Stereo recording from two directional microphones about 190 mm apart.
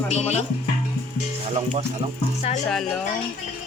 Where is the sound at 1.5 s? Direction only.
35° right (ahead or behind).